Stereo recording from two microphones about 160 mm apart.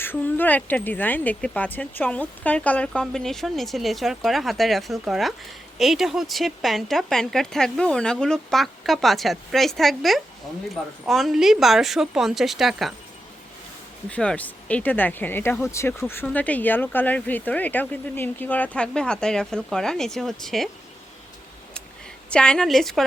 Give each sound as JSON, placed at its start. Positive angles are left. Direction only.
{"t": 0.0, "sound": "speech", "side_deg": 10}
{"t": 14.1, "sound": "speech", "side_deg": 5}
{"t": 22.3, "sound": "speech", "side_deg": 5}